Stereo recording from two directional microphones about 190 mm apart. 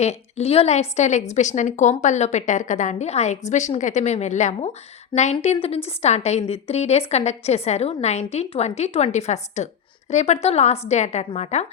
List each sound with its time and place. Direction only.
0.0 s a woman's voice: 35° left (ahead or behind)